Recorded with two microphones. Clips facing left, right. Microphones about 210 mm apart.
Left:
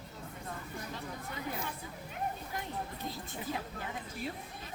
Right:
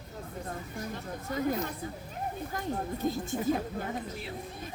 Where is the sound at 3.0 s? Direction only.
45° right (ahead or behind).